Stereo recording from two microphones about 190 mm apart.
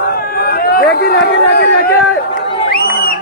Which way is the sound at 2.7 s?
50° left (ahead or behind).